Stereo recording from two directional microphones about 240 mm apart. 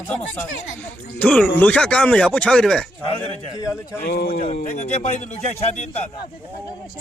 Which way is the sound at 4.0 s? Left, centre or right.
Left.